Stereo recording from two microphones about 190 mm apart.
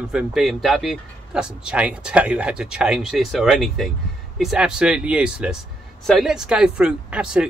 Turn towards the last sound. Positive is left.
turn(degrees=-5)  # may be behind; listen again after turning